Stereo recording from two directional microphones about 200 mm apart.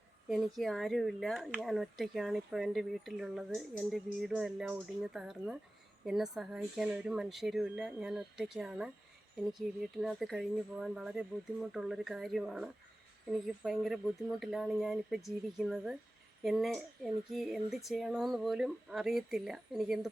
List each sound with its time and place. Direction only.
0.3 s speech: centre (ahead or behind)